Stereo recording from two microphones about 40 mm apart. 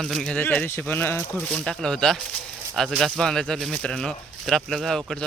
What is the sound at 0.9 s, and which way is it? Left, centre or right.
Speech, left.